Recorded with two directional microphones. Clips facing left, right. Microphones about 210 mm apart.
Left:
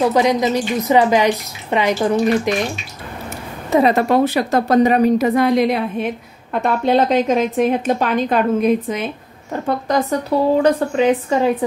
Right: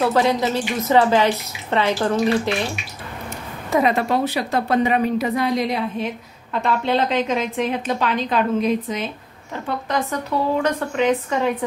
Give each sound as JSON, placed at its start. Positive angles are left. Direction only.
{"t": 0.0, "sound": "speech", "side_deg": 15}
{"t": 3.7, "sound": "speech", "side_deg": 20}
{"t": 4.1, "sound": "a woman's voice", "side_deg": 50}